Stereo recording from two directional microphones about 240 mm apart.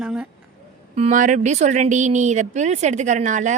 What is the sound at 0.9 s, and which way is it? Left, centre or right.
A woman's voice, right.